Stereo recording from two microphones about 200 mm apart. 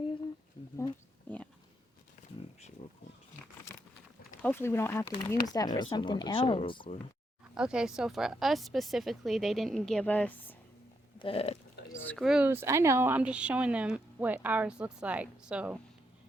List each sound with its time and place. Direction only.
1.3 s a sound: 10° left (ahead or behind)
4.4 s speech: 10° left (ahead or behind)
7.5 s speech: 5° right (ahead or behind)
11.2 s speech: 30° left (ahead or behind)
12.0 s speech: centre (ahead or behind)